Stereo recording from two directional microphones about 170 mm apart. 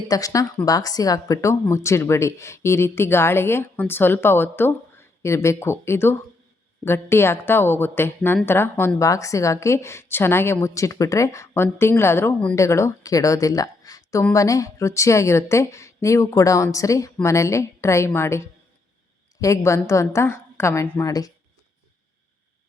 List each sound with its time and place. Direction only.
0.1 s a woman's voice: 20° left (ahead or behind)